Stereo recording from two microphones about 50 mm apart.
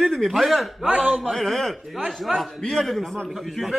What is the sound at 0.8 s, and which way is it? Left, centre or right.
Speech, right.